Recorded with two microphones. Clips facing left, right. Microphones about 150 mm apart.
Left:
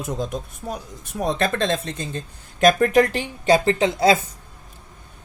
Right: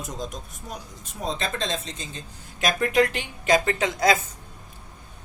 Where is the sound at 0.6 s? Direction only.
90° left.